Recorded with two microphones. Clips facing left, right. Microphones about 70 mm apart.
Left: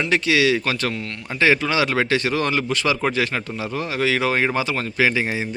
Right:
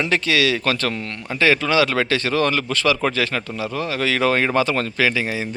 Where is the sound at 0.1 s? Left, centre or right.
Centre.